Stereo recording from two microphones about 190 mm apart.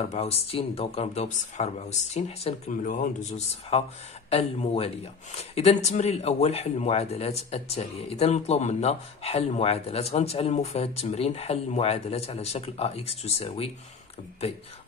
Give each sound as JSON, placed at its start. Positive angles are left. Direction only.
{"t": 0.1, "sound": "speech", "side_deg": 35}